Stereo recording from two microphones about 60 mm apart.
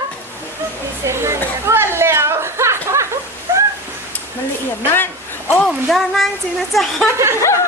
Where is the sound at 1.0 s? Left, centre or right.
Right.